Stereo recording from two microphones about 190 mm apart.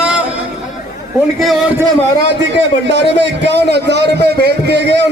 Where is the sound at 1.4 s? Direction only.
Centre (ahead or behind).